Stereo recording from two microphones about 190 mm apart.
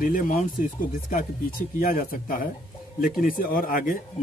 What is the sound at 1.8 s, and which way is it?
Speech, 50° left (ahead or behind).